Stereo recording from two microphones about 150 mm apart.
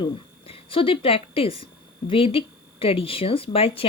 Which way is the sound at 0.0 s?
40° left (ahead or behind).